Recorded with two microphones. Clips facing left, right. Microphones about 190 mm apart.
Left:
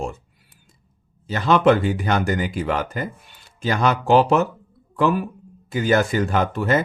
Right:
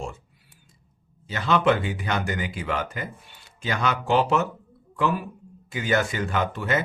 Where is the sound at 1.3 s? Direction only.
40° left (ahead or behind).